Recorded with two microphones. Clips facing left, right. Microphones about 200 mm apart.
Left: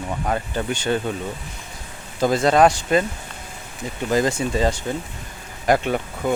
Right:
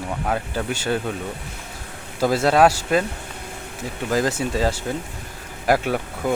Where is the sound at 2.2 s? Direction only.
5° right (ahead or behind).